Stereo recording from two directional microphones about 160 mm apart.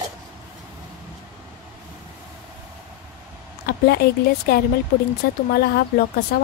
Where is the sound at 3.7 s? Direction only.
85° left.